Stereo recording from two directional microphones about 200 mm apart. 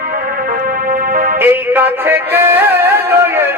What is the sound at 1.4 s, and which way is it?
Music, 10° right (ahead or behind).